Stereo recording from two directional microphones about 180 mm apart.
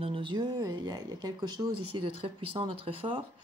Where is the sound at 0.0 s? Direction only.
30° right (ahead or behind).